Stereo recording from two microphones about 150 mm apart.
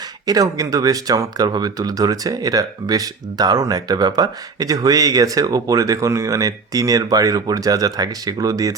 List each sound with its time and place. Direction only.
0.3 s speech: 25° right (ahead or behind)